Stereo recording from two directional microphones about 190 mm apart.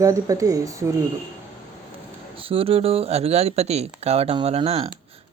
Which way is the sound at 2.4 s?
30° right (ahead or behind).